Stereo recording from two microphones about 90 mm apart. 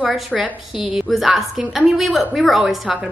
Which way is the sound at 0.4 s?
5° right (ahead or behind).